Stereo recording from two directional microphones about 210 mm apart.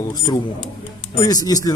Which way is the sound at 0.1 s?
20° left (ahead or behind).